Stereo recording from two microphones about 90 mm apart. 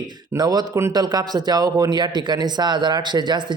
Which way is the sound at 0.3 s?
45° right (ahead or behind).